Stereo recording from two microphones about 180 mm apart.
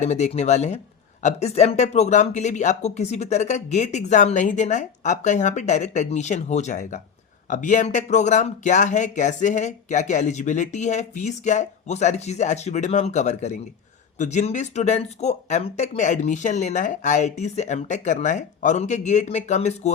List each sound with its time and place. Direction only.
0.0 s speech: 40° left (ahead or behind)